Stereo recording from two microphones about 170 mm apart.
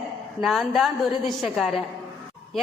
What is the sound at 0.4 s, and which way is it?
A woman's voice, centre (ahead or behind).